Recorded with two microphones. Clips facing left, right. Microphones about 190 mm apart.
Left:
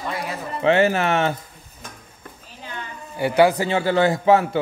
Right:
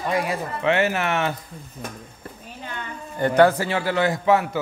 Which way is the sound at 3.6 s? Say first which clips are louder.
Left 3 dB; 25° left (ahead or behind).